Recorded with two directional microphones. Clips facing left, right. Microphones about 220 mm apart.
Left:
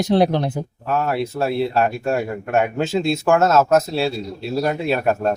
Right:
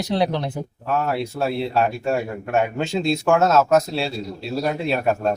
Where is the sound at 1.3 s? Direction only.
Centre (ahead or behind).